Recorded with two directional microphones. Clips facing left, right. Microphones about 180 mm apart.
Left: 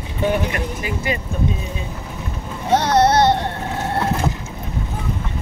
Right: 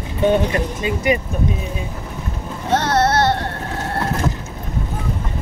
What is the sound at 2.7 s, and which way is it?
Music, 15° left (ahead or behind).